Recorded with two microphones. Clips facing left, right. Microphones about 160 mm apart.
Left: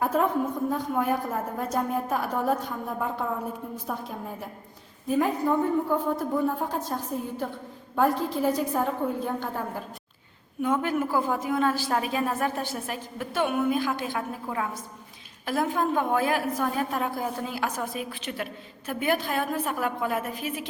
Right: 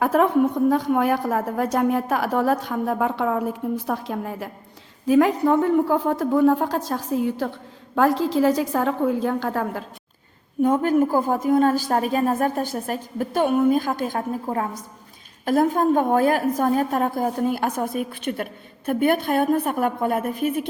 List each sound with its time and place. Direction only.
0.0 s a woman's voice: 80° right
10.6 s a woman's voice: 40° right (ahead or behind)